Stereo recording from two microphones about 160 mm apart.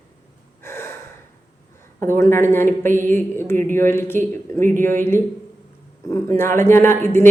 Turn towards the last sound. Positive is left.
turn(degrees=15)  # may be behind; listen again after turning